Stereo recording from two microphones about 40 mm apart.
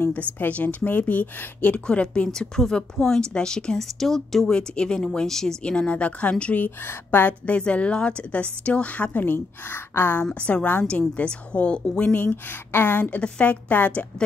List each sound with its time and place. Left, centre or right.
0.1 s a woman's voice: left
1.9 s speech: left
2.2 s a woman's voice: centre
4.5 s a woman's voice: left
5.6 s speech: left
7.1 s speech: left
7.5 s a woman's voice: left
9.2 s a woman's voice: left
10.3 s a woman's voice: left
12.0 s a woman's voice: left
13.2 s a woman's voice: left